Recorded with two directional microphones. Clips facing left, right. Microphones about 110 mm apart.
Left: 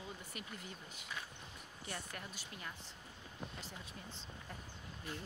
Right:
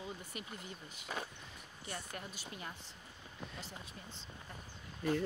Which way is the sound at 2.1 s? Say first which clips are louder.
Right 3 dB; 20° right (ahead or behind).